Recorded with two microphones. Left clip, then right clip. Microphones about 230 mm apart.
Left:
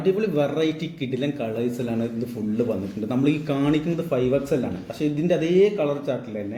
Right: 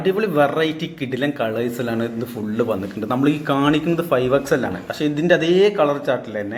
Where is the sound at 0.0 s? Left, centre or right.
Centre.